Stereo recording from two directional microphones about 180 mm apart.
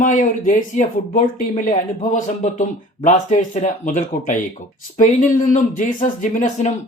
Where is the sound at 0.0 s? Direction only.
45° left (ahead or behind).